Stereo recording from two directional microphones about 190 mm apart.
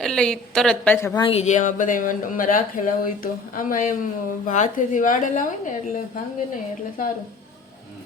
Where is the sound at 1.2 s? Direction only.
30° left (ahead or behind).